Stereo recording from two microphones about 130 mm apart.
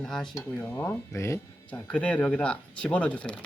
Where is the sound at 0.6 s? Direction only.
15° left (ahead or behind).